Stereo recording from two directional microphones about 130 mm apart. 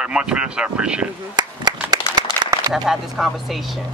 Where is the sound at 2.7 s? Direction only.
5° right (ahead or behind).